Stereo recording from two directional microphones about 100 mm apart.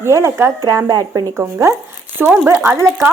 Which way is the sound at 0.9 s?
40° right (ahead or behind).